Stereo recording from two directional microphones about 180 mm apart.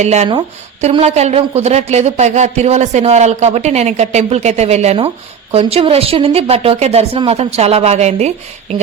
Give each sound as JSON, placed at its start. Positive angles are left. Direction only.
{"t": 0.0, "sound": "speech", "side_deg": -40}